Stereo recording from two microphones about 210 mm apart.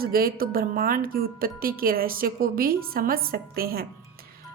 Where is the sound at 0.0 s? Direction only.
45° right (ahead or behind).